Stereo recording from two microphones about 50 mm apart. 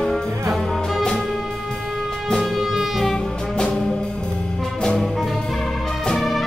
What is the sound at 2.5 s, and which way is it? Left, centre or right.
Music, centre.